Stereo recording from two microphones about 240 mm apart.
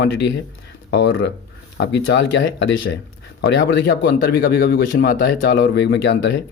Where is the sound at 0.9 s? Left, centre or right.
Left.